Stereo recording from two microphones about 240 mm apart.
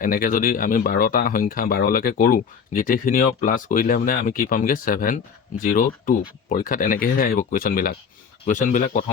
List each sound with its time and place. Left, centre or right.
0.0 s speech: left